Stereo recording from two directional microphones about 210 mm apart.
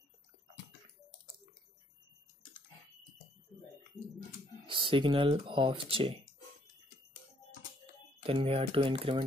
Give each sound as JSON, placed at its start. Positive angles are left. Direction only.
{"t": 4.6, "sound": "speech", "side_deg": -25}
{"t": 8.2, "sound": "speech", "side_deg": -25}